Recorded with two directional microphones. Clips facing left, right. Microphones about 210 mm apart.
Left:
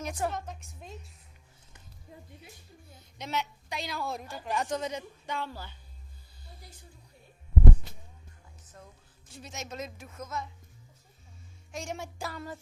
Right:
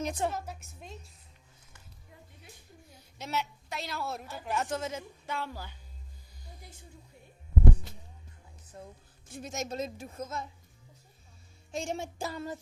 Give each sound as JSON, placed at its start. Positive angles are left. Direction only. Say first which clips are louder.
{"t": 0.0, "sound": "a woman's voice", "louder": "right 1 dB", "side_deg": -20}
{"t": 0.3, "sound": "a sound", "louder": "even", "side_deg": -5}
{"t": 2.9, "sound": "a sound", "louder": "even", "side_deg": -5}
{"t": 3.7, "sound": "a woman's voice", "louder": "left 1 dB", "side_deg": 0}
{"t": 6.4, "sound": "music", "louder": "right 1 dB", "side_deg": -15}
{"t": 9.3, "sound": "a woman's voice", "louder": "right 6 dB", "side_deg": -50}
{"t": 9.7, "sound": "music", "louder": "right 4 dB", "side_deg": -30}
{"t": 11.7, "sound": "music", "louder": "right 3 dB", "side_deg": -30}